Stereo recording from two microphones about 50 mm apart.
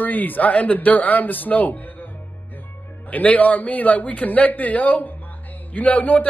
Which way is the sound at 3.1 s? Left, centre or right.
Left.